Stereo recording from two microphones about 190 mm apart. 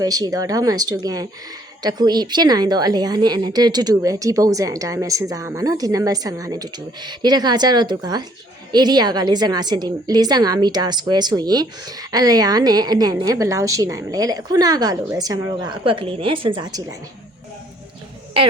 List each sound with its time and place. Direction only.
0.0 s a woman's voice: 20° right (ahead or behind)